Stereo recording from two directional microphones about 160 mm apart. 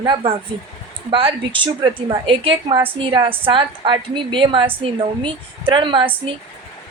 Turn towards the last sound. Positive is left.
turn(degrees=-30)  # may be behind; listen again after turning